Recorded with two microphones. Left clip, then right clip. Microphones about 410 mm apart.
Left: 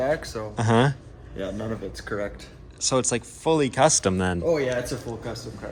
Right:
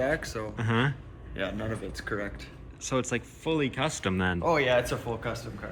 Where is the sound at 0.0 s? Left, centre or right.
Left.